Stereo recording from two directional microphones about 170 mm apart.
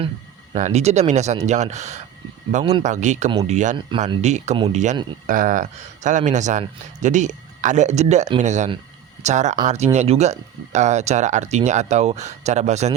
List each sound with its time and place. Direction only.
0.5 s speech: 45° right (ahead or behind)
3.8 s speech: 30° right (ahead or behind)
4.2 s speech: 40° right (ahead or behind)